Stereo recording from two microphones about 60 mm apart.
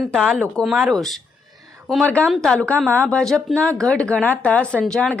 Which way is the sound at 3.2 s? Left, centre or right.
Centre.